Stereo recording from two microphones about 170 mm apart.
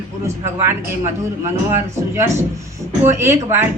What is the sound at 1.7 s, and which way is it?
Speech, 15° right (ahead or behind).